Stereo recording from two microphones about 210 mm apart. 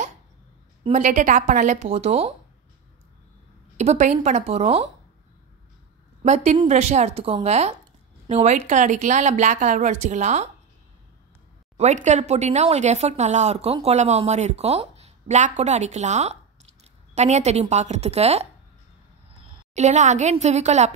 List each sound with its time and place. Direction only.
0.8 s speech: 35° right (ahead or behind)
3.7 s speech: 35° right (ahead or behind)
6.2 s speech: 30° right (ahead or behind)
11.7 s speech: 35° right (ahead or behind)
19.7 s speech: 35° right (ahead or behind)